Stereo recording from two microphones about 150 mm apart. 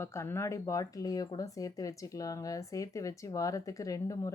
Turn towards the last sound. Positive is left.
turn(degrees=20)  # may be behind; listen again after turning